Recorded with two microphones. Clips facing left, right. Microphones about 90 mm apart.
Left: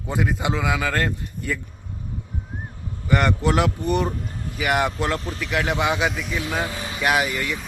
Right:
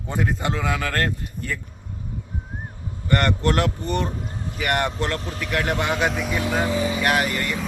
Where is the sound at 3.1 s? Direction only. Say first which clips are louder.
Left 1 dB; 5° left (ahead or behind).